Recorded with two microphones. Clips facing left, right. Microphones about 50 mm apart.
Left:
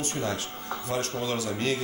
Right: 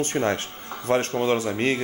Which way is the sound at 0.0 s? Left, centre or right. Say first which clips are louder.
Right 7 dB; right.